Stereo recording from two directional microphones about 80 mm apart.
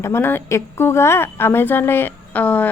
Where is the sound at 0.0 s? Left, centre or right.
Left.